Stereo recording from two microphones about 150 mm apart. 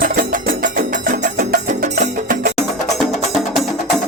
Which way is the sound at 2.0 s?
65° right (ahead or behind).